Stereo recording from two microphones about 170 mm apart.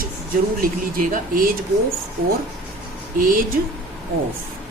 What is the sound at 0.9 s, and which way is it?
Speech, 55° right (ahead or behind).